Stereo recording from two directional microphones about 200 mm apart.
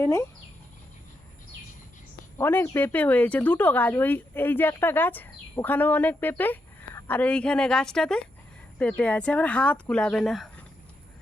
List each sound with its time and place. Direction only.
0.0 s speech: 15° left (ahead or behind)
2.4 s speech: 10° left (ahead or behind)